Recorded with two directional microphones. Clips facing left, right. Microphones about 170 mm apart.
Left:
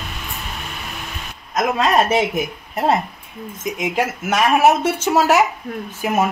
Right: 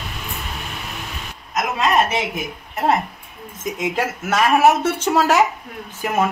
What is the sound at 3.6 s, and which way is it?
Speech, 15° left (ahead or behind).